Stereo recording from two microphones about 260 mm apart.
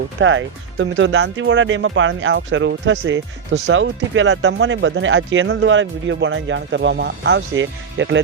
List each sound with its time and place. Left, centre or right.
0.2 s speech: right